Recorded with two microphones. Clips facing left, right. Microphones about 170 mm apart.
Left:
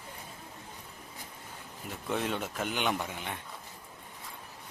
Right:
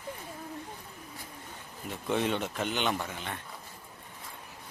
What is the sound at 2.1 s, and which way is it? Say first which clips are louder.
A man's voice: right 3 dB; centre (ahead or behind).